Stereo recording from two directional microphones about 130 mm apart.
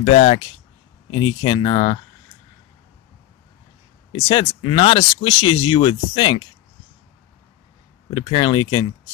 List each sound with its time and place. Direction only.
0.0 s speech: 55° left (ahead or behind)
1.1 s speech: 40° left (ahead or behind)
4.1 s speech: 40° left (ahead or behind)
8.1 s speech: 40° left (ahead or behind)